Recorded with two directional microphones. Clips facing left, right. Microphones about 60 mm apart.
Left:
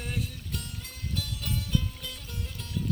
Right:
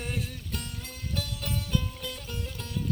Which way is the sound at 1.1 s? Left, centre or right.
Right.